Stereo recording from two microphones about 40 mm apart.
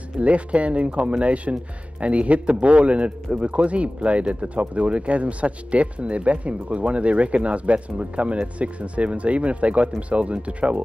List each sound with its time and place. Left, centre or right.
0.2 s speech: right